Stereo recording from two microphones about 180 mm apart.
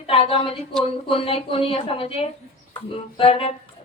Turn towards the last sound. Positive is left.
turn(degrees=30)  # may be behind; listen again after turning